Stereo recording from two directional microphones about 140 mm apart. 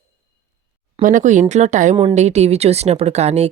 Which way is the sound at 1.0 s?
65° right (ahead or behind).